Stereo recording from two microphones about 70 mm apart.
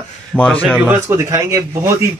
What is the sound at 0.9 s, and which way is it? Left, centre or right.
Speech, right.